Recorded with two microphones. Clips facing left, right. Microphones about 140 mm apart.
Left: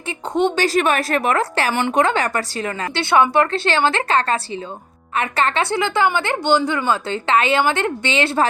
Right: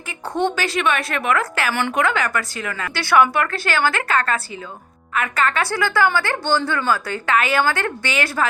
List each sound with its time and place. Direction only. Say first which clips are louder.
0.5 s a woman's voice: left 4 dB; 40° left (ahead or behind)